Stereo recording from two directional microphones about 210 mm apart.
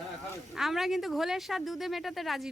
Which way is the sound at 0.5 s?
Centre (ahead or behind).